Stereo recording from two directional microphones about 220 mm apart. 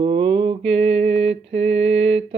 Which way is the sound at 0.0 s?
25° right (ahead or behind).